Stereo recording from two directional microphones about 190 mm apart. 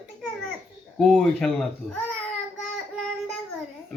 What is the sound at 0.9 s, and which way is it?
Speech, centre (ahead or behind).